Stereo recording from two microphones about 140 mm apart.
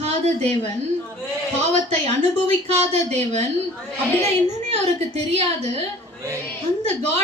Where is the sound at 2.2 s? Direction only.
55° right (ahead or behind).